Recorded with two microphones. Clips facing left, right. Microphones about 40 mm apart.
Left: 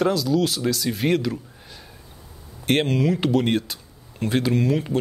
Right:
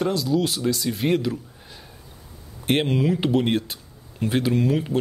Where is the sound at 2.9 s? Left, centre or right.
Centre.